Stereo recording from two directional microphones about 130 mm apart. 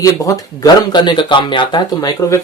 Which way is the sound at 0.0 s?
25° left (ahead or behind).